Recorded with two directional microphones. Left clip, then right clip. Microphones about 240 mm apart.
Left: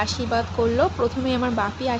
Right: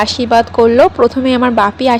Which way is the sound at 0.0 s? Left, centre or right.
Right.